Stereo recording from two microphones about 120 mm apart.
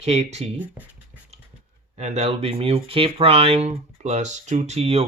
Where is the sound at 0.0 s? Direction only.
60° right (ahead or behind).